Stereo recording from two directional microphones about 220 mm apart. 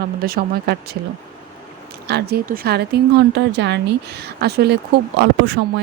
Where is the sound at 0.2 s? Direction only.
45° right (ahead or behind).